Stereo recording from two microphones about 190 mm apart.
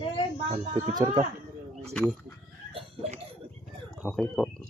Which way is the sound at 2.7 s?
35° right (ahead or behind).